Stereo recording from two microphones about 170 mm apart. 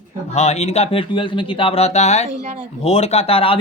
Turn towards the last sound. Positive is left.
turn(degrees=35)  # may be behind; listen again after turning